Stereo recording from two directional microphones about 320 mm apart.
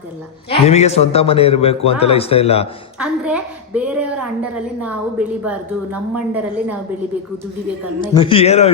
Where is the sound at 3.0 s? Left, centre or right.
Centre.